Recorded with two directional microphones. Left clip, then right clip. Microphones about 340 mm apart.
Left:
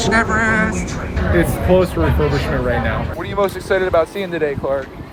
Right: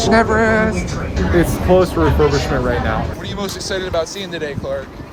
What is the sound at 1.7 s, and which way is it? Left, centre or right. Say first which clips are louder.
Speech: right 2 dB; centre.